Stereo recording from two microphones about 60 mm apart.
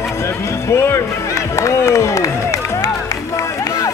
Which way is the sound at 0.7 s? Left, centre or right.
Left.